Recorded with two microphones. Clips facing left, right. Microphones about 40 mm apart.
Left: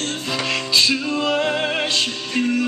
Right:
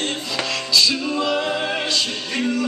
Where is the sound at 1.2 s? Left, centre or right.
Left.